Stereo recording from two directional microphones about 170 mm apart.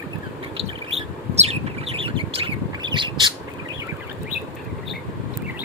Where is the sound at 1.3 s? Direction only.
35° right (ahead or behind).